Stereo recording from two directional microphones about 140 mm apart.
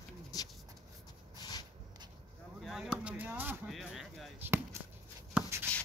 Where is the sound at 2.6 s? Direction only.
5° right (ahead or behind).